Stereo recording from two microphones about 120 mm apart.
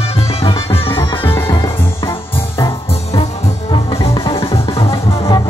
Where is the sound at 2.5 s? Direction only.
35° left (ahead or behind).